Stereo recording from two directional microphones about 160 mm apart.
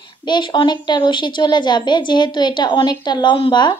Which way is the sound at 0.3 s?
30° left (ahead or behind).